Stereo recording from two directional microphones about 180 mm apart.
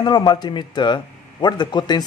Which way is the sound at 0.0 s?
25° left (ahead or behind).